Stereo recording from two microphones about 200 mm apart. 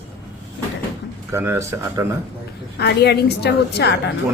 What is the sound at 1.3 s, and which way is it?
Speech, 15° right (ahead or behind).